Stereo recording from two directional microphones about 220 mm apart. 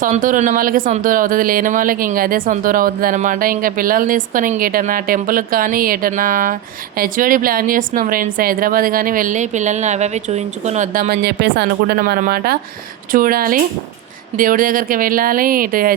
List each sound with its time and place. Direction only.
0.0 s speech: 40° right (ahead or behind)